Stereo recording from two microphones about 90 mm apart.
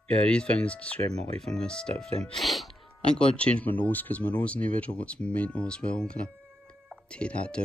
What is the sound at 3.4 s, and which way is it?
Speech, 15° left (ahead or behind).